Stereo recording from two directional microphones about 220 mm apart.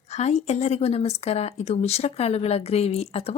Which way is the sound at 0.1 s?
30° left (ahead or behind).